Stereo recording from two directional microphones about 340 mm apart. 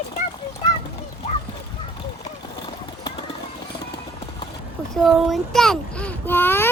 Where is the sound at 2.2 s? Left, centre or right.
Centre.